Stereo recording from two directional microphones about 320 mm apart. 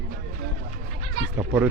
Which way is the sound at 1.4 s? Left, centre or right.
Centre.